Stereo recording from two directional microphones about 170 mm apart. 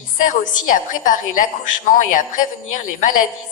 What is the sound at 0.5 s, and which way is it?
A woman's voice, 50° left (ahead or behind).